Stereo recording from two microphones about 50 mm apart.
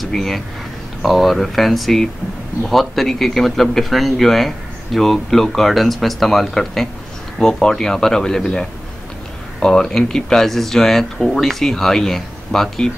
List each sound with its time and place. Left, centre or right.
0.1 s a man's voice: centre
9.6 s speech: centre